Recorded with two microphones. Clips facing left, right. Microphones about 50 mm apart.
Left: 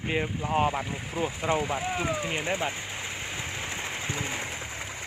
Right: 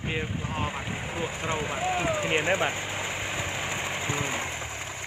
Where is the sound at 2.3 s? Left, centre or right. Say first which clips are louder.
Right 4 dB; right.